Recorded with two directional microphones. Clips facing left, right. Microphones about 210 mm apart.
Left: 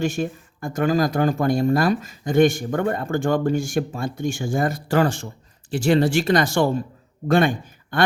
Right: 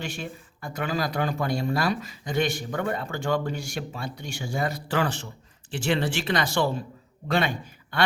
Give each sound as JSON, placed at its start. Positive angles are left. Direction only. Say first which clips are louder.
{"t": 0.0, "sound": "a man's voice", "louder": "left 11 dB", "side_deg": 45}